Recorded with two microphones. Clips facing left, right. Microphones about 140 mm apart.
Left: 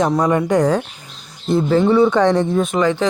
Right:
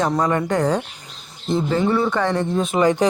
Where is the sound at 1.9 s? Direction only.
15° left (ahead or behind).